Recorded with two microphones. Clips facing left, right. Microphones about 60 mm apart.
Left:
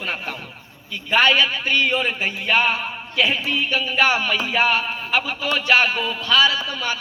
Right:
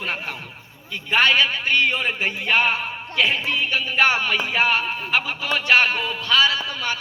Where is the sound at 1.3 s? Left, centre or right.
Right.